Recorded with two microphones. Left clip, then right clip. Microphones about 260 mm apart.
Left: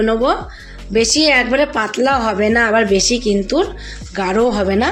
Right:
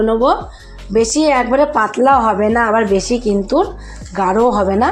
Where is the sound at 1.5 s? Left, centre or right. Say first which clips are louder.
Right 3 dB; centre.